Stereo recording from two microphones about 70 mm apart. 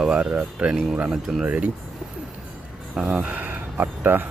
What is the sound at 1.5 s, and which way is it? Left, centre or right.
Speech, centre.